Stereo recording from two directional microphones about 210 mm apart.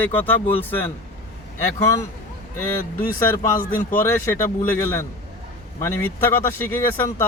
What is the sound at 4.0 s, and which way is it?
Speech, 10° left (ahead or behind).